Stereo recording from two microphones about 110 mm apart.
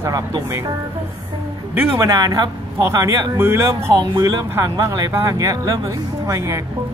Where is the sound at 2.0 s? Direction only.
30° right (ahead or behind).